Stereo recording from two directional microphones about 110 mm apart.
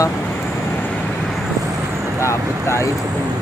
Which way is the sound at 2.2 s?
25° left (ahead or behind).